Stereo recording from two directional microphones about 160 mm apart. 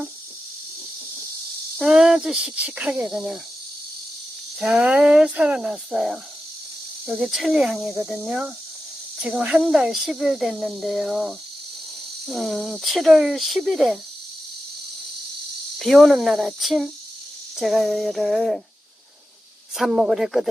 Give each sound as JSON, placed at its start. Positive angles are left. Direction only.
{"t": 1.8, "sound": "speech", "side_deg": -5}
{"t": 4.6, "sound": "speech", "side_deg": -5}
{"t": 15.8, "sound": "speech", "side_deg": 0}
{"t": 19.7, "sound": "speech", "side_deg": 0}